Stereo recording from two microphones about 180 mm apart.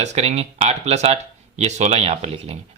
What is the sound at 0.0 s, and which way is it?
Speech, 40° right (ahead or behind).